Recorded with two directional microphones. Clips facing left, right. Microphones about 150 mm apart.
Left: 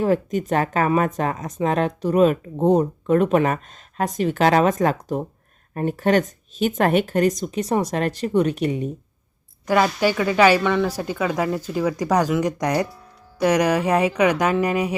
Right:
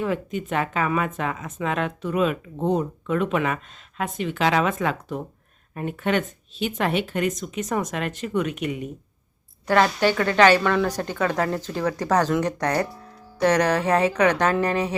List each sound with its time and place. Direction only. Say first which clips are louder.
0.0 s speech: left 6 dB; 40° left (ahead or behind)
9.6 s speech: left 1 dB; 10° left (ahead or behind)